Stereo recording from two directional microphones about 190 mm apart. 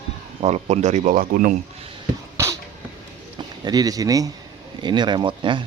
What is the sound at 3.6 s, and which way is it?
Speech, 20° right (ahead or behind).